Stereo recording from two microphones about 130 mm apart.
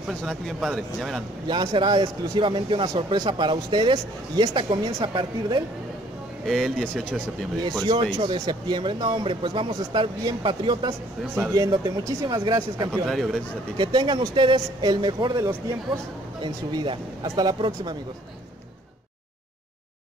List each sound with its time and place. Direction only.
0.2 s speech: centre (ahead or behind)
1.5 s speech: 35° right (ahead or behind)
6.4 s speech: centre (ahead or behind)
7.8 s speech: 40° right (ahead or behind)
13.0 s speech: centre (ahead or behind)
13.7 s speech: 35° right (ahead or behind)